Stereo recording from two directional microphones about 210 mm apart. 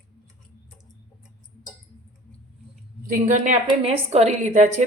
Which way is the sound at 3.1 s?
40° right (ahead or behind).